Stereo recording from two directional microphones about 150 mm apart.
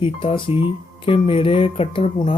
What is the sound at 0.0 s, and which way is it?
Speech, 35° left (ahead or behind).